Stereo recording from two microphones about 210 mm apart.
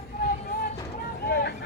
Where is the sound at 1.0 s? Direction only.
50° left (ahead or behind).